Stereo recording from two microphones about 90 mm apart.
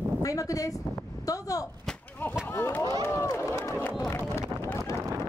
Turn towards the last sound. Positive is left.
turn(degrees=35)  # may be behind; listen again after turning